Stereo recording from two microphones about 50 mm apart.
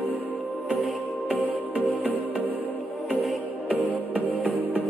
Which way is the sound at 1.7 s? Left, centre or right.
Right.